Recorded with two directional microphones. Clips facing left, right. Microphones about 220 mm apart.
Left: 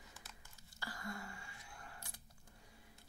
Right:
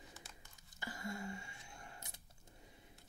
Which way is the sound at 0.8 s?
20° right (ahead or behind).